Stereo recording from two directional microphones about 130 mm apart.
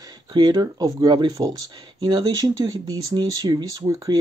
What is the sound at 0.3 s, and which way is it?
Speech, 35° right (ahead or behind).